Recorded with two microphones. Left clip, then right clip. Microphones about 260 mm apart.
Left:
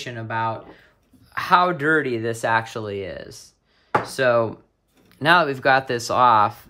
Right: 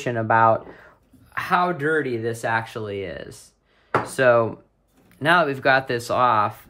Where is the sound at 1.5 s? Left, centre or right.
Centre.